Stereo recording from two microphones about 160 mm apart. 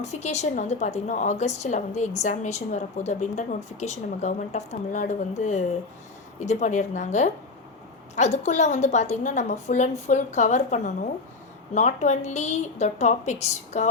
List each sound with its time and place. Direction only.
0.0 s a woman's voice: 45° left (ahead or behind)